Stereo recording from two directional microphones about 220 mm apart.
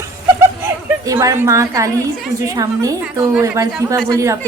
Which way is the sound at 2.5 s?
15° right (ahead or behind).